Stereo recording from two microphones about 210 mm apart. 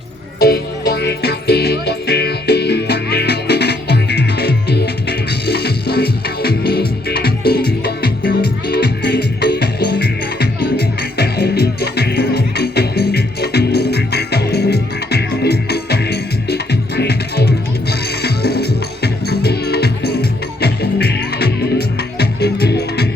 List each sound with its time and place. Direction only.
0.3 s music: 45° left (ahead or behind)